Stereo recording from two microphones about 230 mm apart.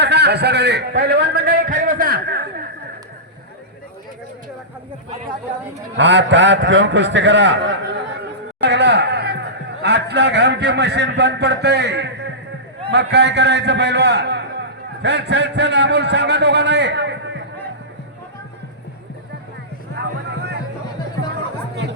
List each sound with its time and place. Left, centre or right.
0.0 s a man's voice: right
6.0 s a man's voice: right
20.3 s music: right